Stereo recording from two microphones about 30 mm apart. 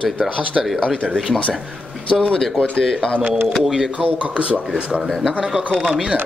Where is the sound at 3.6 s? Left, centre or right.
Centre.